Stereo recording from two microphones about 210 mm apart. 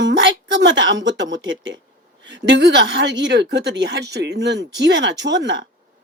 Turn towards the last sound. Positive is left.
turn(degrees=-60)  # may be behind; listen again after turning